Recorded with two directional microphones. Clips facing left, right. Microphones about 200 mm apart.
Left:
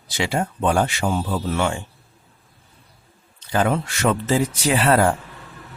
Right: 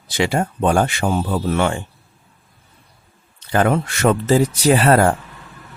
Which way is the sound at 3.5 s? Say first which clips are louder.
Right 3 dB; 60° right (ahead or behind).